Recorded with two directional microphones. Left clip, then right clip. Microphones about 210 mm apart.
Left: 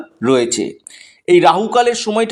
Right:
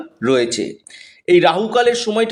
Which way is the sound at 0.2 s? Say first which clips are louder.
Left 2 dB; 20° left (ahead or behind).